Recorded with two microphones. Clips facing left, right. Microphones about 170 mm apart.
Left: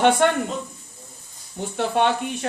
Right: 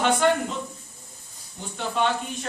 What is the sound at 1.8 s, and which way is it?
Speech, 65° left (ahead or behind).